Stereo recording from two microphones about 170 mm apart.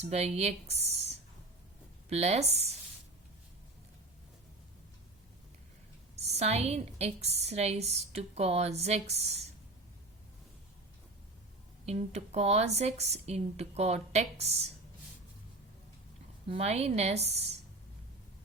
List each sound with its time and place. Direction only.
0.0 s a woman's voice: 40° right (ahead or behind)
6.1 s a woman's voice: 40° right (ahead or behind)
11.9 s a woman's voice: 40° right (ahead or behind)
16.5 s a woman's voice: 35° right (ahead or behind)